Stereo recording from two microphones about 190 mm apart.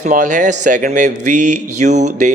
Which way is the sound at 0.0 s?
40° right (ahead or behind).